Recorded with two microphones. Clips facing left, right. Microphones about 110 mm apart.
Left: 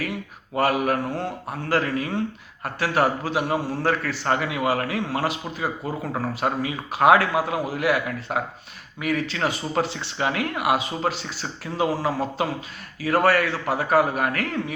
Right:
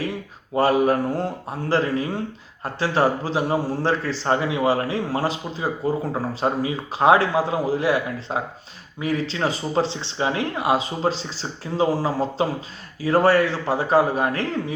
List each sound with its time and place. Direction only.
0.0 s a man's voice: 30° right (ahead or behind)